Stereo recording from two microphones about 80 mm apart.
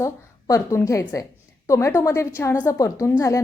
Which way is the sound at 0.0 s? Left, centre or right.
Left.